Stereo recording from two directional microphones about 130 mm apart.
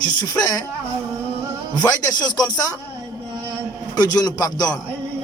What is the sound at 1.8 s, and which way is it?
Speech, 30° left (ahead or behind).